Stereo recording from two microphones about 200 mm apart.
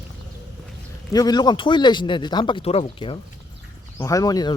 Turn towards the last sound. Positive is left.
turn(degrees=20)  # may be behind; listen again after turning